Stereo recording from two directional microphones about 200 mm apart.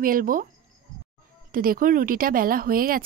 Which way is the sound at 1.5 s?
45° right (ahead or behind).